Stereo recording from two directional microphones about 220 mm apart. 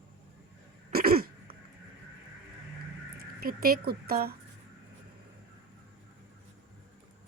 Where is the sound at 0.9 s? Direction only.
45° right (ahead or behind).